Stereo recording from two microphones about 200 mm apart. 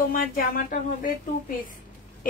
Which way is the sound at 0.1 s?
45° left (ahead or behind).